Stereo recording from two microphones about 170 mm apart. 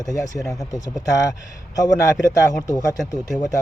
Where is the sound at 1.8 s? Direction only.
20° left (ahead or behind).